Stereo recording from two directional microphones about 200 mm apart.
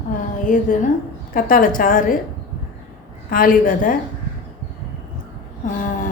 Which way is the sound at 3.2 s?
45° left (ahead or behind).